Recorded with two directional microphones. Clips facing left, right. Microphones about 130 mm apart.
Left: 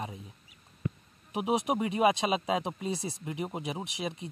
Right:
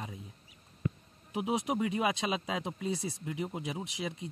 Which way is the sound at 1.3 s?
20° left (ahead or behind).